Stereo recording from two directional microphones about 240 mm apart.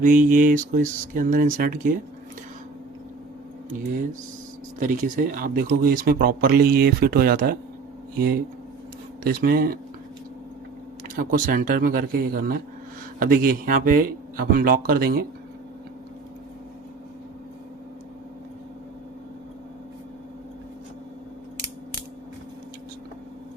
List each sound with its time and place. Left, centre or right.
0.0 s speech: right
3.7 s speech: right
9.2 s speech: right
11.2 s speech: right